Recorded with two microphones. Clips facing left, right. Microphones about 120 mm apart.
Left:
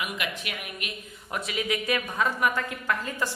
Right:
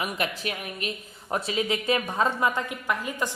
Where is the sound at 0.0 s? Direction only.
35° right (ahead or behind).